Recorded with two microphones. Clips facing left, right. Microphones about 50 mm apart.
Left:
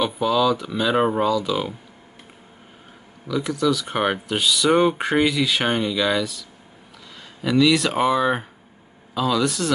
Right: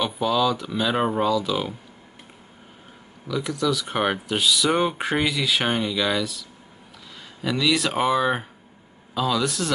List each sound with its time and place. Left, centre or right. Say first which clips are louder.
0.0 s speech: left 2 dB; centre
3.3 s speech: left 3 dB; centre
7.4 s speech: left 5 dB; centre